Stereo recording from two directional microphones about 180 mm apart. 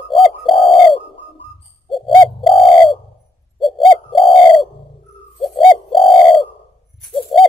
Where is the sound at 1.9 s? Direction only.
Centre (ahead or behind).